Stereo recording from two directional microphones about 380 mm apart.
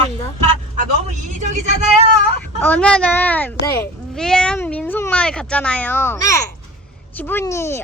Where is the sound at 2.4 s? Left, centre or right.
Centre.